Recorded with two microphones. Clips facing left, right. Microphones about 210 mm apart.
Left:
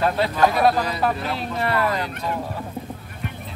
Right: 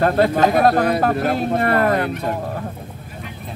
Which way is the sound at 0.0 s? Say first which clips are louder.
Right 4 dB; 50° right (ahead or behind).